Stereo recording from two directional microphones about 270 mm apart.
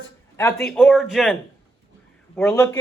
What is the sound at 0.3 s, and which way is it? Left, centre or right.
Speech, centre.